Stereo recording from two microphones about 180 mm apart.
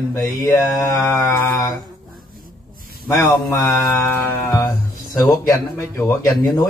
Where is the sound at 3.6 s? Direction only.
Centre (ahead or behind).